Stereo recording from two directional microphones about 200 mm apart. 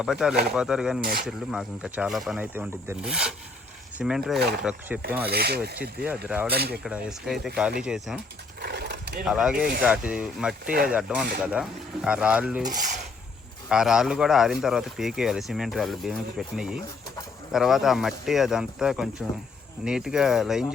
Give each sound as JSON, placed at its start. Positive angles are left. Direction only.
{"t": 0.0, "sound": "speech", "side_deg": -5}
{"t": 4.4, "sound": "speech", "side_deg": -55}
{"t": 6.2, "sound": "speech", "side_deg": -5}
{"t": 6.5, "sound": "speech", "side_deg": -50}
{"t": 6.8, "sound": "speech", "side_deg": -5}
{"t": 8.6, "sound": "horse", "side_deg": -55}
{"t": 9.2, "sound": "speech", "side_deg": -5}
{"t": 13.7, "sound": "speech", "side_deg": -5}